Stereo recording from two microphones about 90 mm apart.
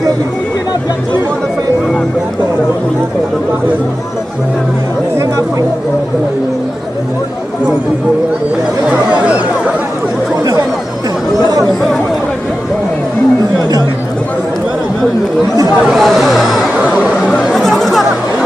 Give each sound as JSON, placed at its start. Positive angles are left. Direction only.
{"t": 5.1, "sound": "chatter", "side_deg": -30}
{"t": 15.9, "sound": "speech", "side_deg": 0}
{"t": 17.6, "sound": "music", "side_deg": 5}